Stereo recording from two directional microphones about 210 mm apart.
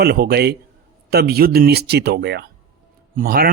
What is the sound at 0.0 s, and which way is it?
Speech, 50° right (ahead or behind).